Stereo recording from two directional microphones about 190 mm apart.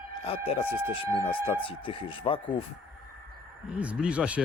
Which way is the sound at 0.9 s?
25° left (ahead or behind).